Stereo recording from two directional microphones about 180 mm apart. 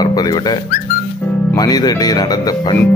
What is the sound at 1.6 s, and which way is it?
Speech, 20° left (ahead or behind).